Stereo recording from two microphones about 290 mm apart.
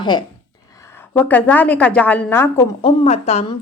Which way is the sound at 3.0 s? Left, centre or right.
Left.